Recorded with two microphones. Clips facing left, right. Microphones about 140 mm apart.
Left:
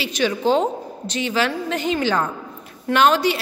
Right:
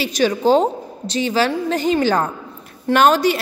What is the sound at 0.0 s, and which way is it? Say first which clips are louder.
A woman's voice: right 4 dB; 40° right (ahead or behind).